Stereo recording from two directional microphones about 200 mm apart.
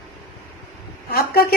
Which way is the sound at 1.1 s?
50° left (ahead or behind).